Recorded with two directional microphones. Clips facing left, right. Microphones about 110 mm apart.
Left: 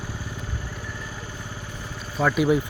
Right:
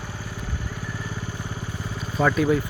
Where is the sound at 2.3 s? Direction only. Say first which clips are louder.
Left 3 dB; 15° left (ahead or behind).